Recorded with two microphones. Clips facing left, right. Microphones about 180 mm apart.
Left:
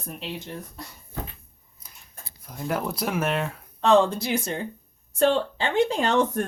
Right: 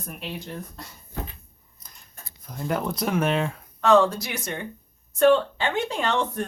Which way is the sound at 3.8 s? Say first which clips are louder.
Even; 25° left (ahead or behind).